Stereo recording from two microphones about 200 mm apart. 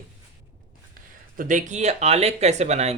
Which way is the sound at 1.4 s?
40° right (ahead or behind).